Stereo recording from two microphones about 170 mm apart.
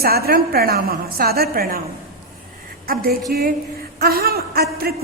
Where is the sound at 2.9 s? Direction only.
60° right (ahead or behind).